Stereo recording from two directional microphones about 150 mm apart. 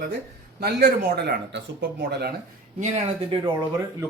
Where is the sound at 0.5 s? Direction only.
90° right.